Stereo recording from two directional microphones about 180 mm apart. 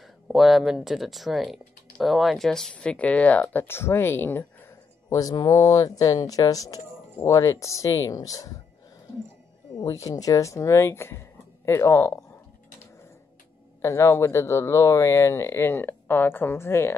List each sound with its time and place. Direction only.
0.0 s speech: centre (ahead or behind); by 8.5 s 20° left (ahead or behind)
9.8 s speech: 20° left (ahead or behind)
13.7 s speech: 15° left (ahead or behind)